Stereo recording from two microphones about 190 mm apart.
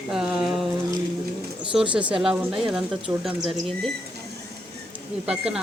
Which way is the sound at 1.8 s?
25° right (ahead or behind).